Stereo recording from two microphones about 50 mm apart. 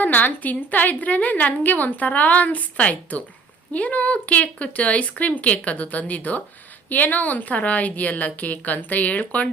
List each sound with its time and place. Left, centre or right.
0.0 s a woman's voice: left